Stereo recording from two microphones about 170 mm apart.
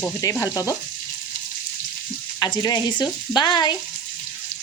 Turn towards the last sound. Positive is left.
turn(degrees=25)  # may be behind; listen again after turning